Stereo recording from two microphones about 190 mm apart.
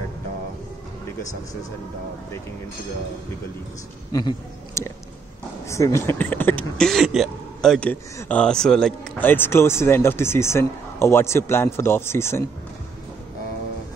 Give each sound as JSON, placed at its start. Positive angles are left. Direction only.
{"t": 4.1, "sound": "speech", "side_deg": 20}